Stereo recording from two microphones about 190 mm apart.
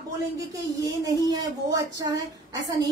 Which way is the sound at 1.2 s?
20° right (ahead or behind).